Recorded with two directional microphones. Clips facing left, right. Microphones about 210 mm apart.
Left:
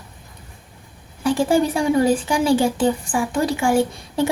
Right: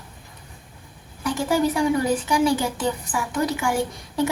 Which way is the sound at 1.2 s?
30° left (ahead or behind).